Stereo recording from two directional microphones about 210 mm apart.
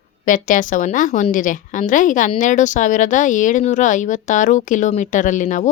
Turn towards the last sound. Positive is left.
turn(degrees=35)  # may be behind; listen again after turning